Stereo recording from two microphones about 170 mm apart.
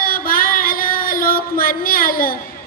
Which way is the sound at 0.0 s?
60° left (ahead or behind).